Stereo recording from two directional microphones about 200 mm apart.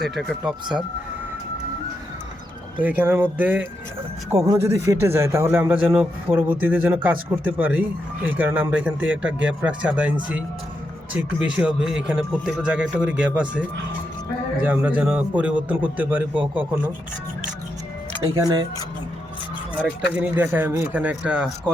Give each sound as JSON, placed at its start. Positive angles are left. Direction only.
{"t": 0.0, "sound": "a man's voice", "side_deg": 0}
{"t": 2.8, "sound": "a man's voice", "side_deg": -10}
{"t": 18.2, "sound": "speech", "side_deg": -20}
{"t": 20.1, "sound": "speech", "side_deg": -10}